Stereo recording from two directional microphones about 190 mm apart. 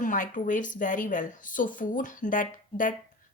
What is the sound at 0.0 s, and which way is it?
Speech, 45° left (ahead or behind).